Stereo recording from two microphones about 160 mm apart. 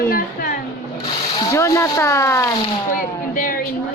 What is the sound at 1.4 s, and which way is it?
Speech, 20° left (ahead or behind).